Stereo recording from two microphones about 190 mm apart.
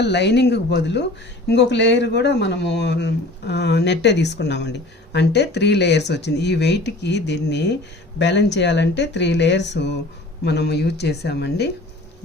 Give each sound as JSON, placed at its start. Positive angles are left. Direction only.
{"t": 0.0, "sound": "speech", "side_deg": 65}